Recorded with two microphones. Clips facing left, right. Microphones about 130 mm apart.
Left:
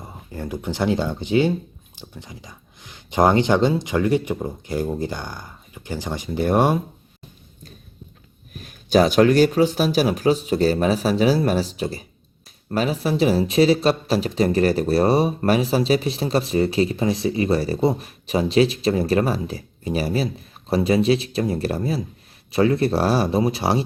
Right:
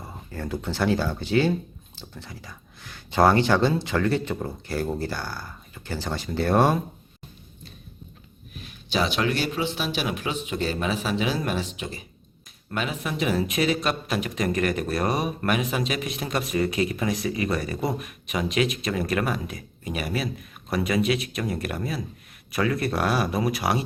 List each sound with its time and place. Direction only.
0.0 s speech: 15° left (ahead or behind)
8.5 s speech: 45° left (ahead or behind); by 23.8 s 30° left (ahead or behind)